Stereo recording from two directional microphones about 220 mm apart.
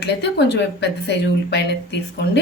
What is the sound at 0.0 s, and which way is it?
Speech, 50° left (ahead or behind).